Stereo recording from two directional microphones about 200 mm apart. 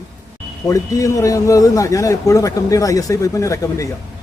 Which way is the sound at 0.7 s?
15° left (ahead or behind).